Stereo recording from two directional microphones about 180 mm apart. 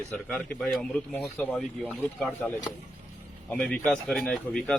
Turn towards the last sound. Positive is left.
turn(degrees=5)  # may be behind; listen again after turning